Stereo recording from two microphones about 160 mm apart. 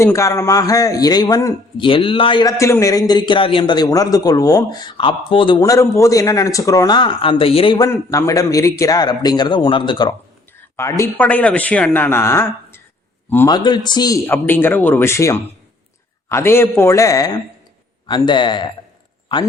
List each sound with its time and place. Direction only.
0.0 s a man's voice: 15° left (ahead or behind)
1.8 s a man's voice: 35° left (ahead or behind)
7.8 s a man's voice: 20° left (ahead or behind)
13.5 s a man's voice: 25° left (ahead or behind)
14.3 s a man's voice: 15° left (ahead or behind); by 18.7 s 30° left (ahead or behind)